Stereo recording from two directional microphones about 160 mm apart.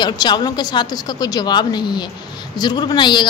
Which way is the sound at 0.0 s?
25° left (ahead or behind).